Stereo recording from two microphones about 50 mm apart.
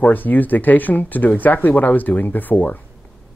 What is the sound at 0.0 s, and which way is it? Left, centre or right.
Speech, left.